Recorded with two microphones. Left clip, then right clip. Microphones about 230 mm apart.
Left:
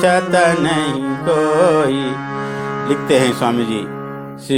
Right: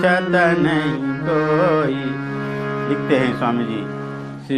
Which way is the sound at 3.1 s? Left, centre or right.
Left.